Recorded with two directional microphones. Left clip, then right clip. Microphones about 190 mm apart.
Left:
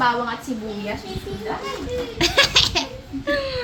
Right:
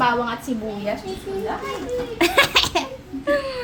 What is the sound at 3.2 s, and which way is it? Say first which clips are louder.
Whimper: right 1 dB; 10° right (ahead or behind).